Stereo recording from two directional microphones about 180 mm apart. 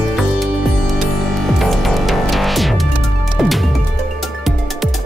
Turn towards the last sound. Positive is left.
turn(degrees=0)  # may be behind; listen again after turning